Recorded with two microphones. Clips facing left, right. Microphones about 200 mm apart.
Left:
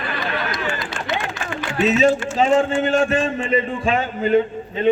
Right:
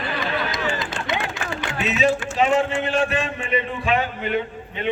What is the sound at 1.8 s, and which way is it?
Speech, 45° left (ahead or behind).